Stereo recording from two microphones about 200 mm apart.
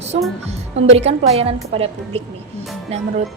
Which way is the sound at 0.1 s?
40° right (ahead or behind).